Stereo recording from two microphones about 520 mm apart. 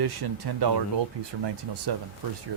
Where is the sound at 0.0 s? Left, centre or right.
Right.